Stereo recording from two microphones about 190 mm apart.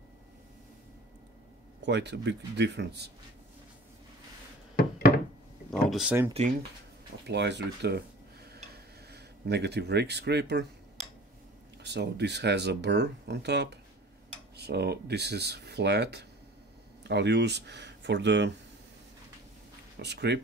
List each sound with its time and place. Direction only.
1.9 s speech: 65° right (ahead or behind)
5.7 s a sound: centre (ahead or behind)
6.4 s speech: 35° right (ahead or behind)
7.2 s speech: 65° right (ahead or behind)
9.1 s speech: 60° right (ahead or behind)
11.8 s speech: 65° right (ahead or behind)
20.0 s speech: 65° right (ahead or behind)